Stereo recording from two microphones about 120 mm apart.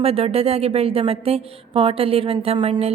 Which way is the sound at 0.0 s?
55° right (ahead or behind).